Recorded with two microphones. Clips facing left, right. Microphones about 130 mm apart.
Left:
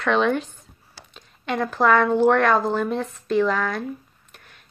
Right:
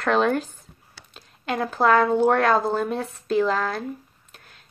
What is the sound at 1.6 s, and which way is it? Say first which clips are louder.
A woman's voice: even; 35° right (ahead or behind).